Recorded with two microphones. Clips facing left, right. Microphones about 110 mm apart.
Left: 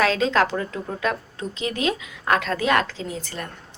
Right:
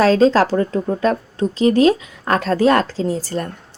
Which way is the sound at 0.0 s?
35° right (ahead or behind).